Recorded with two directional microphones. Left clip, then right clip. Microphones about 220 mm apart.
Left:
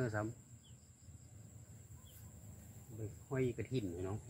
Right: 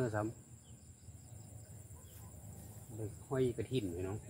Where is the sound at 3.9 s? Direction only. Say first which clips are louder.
Right 2 dB; 25° left (ahead or behind).